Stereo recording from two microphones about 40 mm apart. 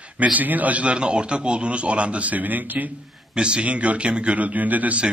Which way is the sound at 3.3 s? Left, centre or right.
Right.